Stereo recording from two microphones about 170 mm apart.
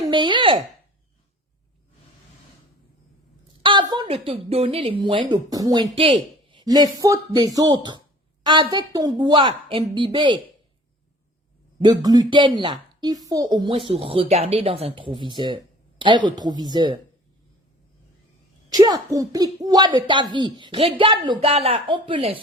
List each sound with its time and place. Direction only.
0.1 s a sound: 30° right (ahead or behind)
3.6 s a woman's voice: 30° right (ahead or behind)
11.8 s a woman's voice: 25° right (ahead or behind)
18.7 s a woman's voice: 25° right (ahead or behind)